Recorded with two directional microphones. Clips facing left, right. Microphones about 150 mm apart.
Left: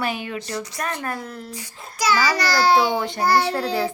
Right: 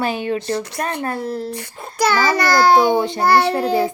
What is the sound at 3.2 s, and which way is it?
Child singing, 60° right (ahead or behind).